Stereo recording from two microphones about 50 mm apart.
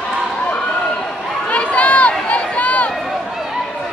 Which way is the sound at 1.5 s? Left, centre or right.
Left.